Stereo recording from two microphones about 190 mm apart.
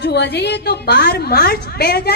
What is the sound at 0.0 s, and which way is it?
A woman's voice, 60° left (ahead or behind).